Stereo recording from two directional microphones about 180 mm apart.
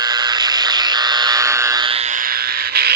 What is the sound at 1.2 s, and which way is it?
Frog, 20° right (ahead or behind).